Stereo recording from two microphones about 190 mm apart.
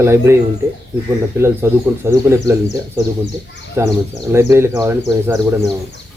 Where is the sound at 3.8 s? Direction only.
15° right (ahead or behind).